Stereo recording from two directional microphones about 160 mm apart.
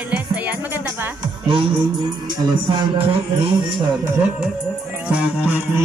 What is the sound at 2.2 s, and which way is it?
Speech, 30° right (ahead or behind).